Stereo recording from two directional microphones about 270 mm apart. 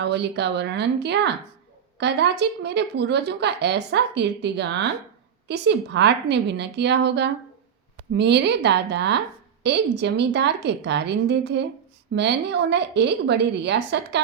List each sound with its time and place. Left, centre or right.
0.0 s speech: right